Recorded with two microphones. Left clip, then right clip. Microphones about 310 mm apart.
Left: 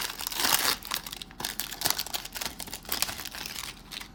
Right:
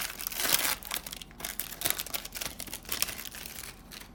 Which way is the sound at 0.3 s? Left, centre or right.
Centre.